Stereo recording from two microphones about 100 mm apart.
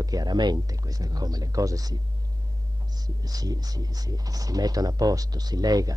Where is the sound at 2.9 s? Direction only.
40° right (ahead or behind).